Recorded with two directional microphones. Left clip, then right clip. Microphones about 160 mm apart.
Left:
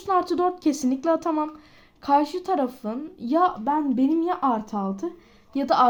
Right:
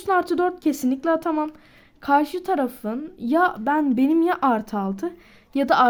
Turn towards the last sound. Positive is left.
turn(degrees=-30)  # may be behind; listen again after turning